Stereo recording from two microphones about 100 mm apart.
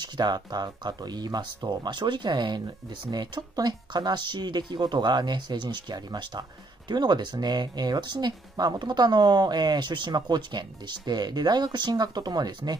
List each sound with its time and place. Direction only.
0.0 s speech: 45° right (ahead or behind)